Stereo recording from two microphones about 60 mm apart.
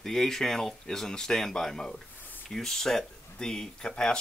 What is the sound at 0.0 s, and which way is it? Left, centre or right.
Speech, centre.